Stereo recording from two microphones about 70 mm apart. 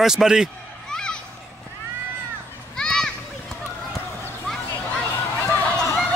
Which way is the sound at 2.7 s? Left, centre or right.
Centre.